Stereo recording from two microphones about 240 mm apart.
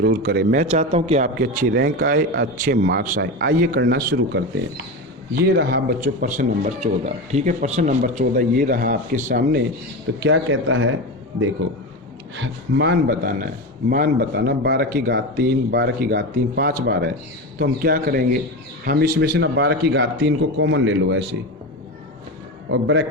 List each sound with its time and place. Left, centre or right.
0.0 s speech: right
0.6 s a man's voice: right
1.4 s speech: right
10.2 s speech: right
12.4 s a man's voice: right
22.7 s a man's voice: right